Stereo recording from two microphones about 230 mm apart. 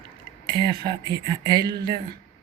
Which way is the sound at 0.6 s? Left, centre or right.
Centre.